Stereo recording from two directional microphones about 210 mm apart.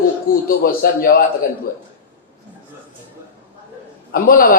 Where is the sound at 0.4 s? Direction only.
45° left (ahead or behind).